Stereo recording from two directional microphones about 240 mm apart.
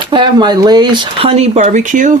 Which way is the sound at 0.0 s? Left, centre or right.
Centre.